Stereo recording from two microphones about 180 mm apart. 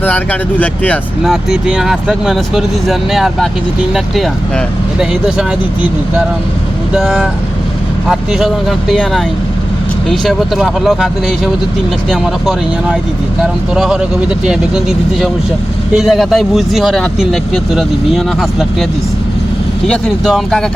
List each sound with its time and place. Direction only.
0.0 s speech: 10° left (ahead or behind)
6.9 s speech: 5° right (ahead or behind)
19.9 s speech: centre (ahead or behind)